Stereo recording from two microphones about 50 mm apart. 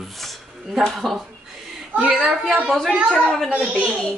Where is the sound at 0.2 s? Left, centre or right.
Centre.